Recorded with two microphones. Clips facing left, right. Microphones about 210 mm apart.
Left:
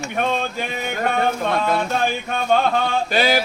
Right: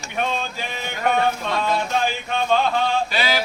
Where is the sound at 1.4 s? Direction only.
55° left (ahead or behind).